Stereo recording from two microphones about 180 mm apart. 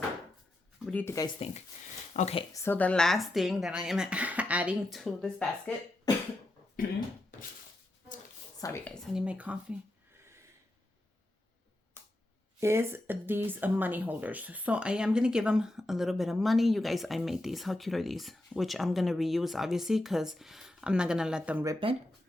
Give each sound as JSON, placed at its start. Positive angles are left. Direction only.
{"t": 0.9, "sound": "speech", "side_deg": 10}
{"t": 2.1, "sound": "speech", "side_deg": 35}
{"t": 2.5, "sound": "speech", "side_deg": 15}
{"t": 8.6, "sound": "speech", "side_deg": 15}
{"t": 9.1, "sound": "speech", "side_deg": -5}
{"t": 10.2, "sound": "snort", "side_deg": -15}
{"t": 12.5, "sound": "speech", "side_deg": -15}
{"t": 21.6, "sound": "speech", "side_deg": -20}